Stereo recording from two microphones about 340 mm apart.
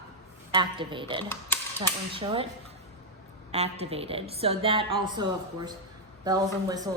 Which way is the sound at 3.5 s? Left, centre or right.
Centre.